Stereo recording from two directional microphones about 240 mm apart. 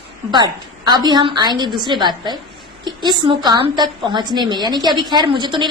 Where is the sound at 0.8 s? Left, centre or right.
Centre.